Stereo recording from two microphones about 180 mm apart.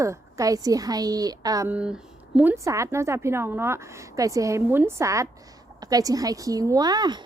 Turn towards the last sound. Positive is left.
turn(degrees=-20)  # may be behind; listen again after turning